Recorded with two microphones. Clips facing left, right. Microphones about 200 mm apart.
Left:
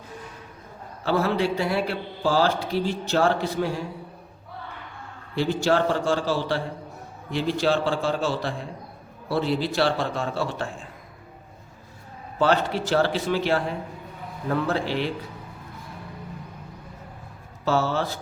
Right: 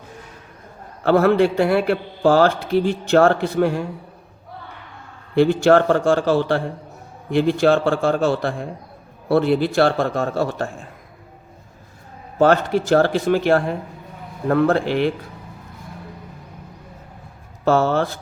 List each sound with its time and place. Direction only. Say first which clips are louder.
1.0 s a man's voice: right 8 dB; 55° right (ahead or behind)
5.3 s a man's voice: right 8 dB; 55° right (ahead or behind)
12.4 s a man's voice: right 6 dB; 50° right (ahead or behind)
17.7 s a man's voice: right 6 dB; 55° right (ahead or behind)